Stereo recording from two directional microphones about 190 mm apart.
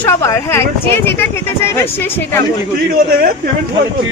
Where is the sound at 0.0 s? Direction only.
15° left (ahead or behind).